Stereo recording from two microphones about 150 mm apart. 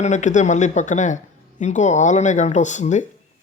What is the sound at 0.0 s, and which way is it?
Speech, 55° left (ahead or behind).